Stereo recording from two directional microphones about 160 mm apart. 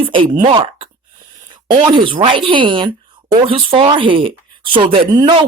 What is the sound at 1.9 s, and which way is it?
Speech, 30° right (ahead or behind).